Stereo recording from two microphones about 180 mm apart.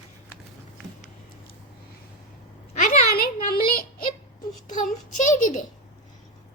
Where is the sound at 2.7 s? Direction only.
45° left (ahead or behind).